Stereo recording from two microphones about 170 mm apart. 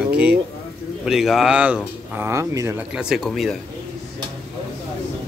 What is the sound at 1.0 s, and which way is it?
Speech, centre (ahead or behind).